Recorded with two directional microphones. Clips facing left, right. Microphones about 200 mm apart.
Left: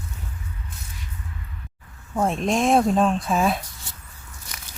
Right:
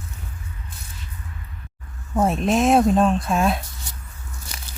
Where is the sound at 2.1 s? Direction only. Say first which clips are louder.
Right 3 dB; 5° right (ahead or behind).